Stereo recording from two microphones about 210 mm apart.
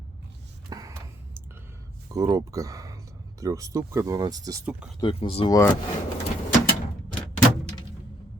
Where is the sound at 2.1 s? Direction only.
15° right (ahead or behind).